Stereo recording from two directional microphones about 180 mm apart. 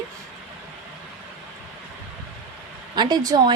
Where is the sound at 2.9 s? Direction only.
20° right (ahead or behind).